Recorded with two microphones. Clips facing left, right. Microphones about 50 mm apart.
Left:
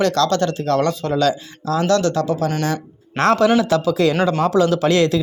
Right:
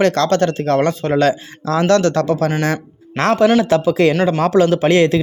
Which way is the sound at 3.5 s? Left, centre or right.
Right.